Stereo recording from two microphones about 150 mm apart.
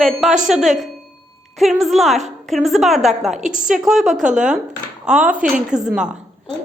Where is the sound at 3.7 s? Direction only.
5° right (ahead or behind).